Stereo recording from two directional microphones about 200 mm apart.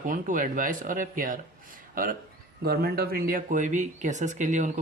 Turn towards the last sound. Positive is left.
turn(degrees=-35)  # may be behind; listen again after turning